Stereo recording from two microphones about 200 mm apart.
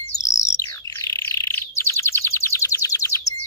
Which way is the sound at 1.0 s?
15° left (ahead or behind).